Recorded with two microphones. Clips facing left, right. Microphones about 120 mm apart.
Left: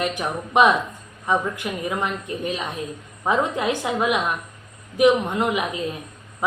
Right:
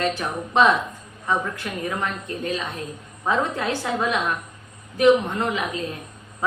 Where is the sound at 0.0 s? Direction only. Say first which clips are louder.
Even; 15° left (ahead or behind).